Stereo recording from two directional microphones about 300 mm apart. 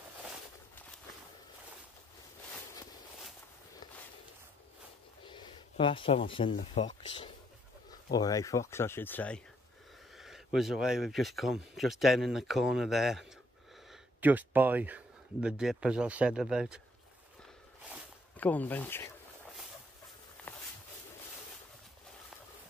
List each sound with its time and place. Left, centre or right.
5.2 s speech: centre
8.1 s speech: centre
17.8 s zipper: centre
20.4 s a sound: centre